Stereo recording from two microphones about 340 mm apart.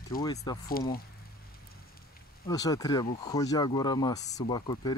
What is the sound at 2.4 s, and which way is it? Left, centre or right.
Speech, centre.